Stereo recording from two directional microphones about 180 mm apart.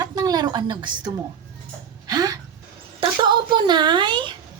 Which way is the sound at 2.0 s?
20° right (ahead or behind).